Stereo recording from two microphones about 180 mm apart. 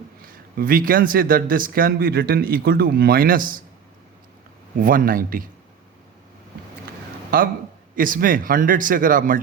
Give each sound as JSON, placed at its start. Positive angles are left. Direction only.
{"t": 0.5, "sound": "speech", "side_deg": -50}
{"t": 4.8, "sound": "speech", "side_deg": -50}
{"t": 7.3, "sound": "speech", "side_deg": -50}